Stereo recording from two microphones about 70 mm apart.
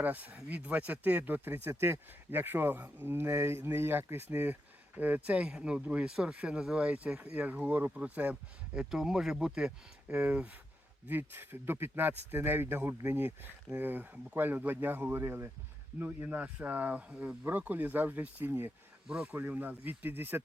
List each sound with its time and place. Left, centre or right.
0.0 s speech: right
8.9 s speech: centre
11.1 s speech: right
16.0 s speech: right
19.0 s speech: centre
19.4 s speech: right